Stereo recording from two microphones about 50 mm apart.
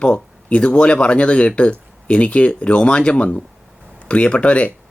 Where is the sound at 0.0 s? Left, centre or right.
Left.